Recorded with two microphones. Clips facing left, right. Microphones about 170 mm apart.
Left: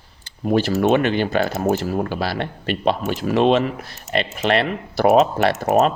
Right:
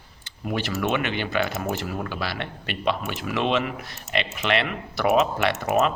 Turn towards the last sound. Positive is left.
turn(degrees=35)  # may be behind; listen again after turning